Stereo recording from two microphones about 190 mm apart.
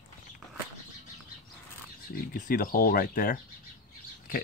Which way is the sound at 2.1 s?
50° left (ahead or behind).